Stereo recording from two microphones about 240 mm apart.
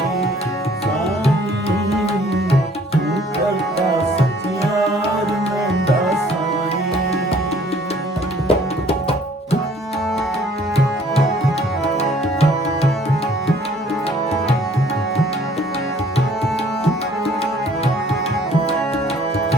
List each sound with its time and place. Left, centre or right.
8.4 s tabla: left
11.9 s music: left